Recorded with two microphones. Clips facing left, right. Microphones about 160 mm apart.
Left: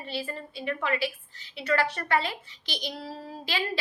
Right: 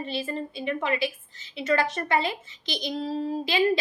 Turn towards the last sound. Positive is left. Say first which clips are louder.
# right 8 dB
turn(degrees=-20)  # may be behind; listen again after turning